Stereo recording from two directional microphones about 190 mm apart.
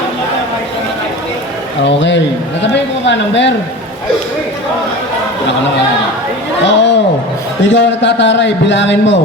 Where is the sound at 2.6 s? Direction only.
70° left (ahead or behind).